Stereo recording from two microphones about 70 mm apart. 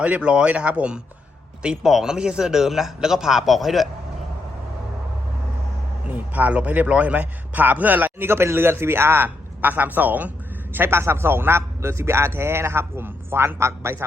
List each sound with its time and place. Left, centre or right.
0.0 s speech: centre
6.1 s a man's voice: right